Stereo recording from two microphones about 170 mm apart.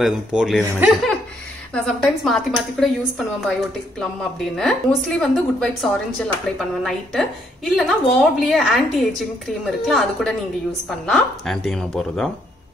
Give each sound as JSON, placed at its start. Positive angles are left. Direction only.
{"t": 0.0, "sound": "a woman's voice", "side_deg": -5}